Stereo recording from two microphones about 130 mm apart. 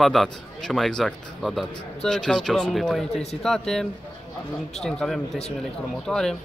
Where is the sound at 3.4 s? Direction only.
5° left (ahead or behind).